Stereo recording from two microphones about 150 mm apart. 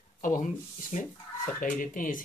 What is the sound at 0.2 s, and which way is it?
Speech, 60° left (ahead or behind).